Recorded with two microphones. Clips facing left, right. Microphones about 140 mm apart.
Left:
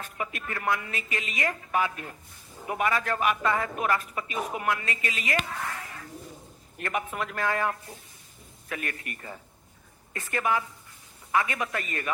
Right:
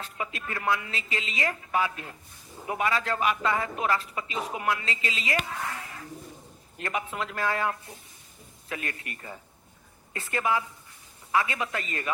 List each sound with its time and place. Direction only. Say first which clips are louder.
0.2 s speech: left 1 dB; 25° right (ahead or behind)